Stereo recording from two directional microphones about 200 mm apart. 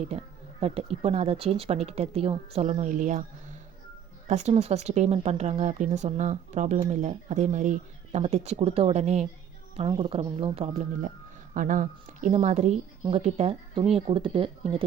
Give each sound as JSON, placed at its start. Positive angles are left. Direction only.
{"t": 0.6, "sound": "speech", "side_deg": -30}